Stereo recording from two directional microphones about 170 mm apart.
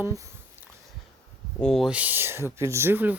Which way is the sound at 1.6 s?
Centre (ahead or behind).